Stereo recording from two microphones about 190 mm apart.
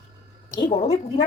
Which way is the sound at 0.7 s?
35° left (ahead or behind).